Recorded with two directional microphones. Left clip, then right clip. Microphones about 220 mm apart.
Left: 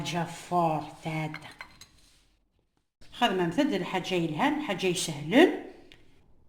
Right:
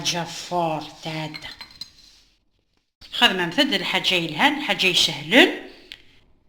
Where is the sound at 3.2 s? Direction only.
15° left (ahead or behind).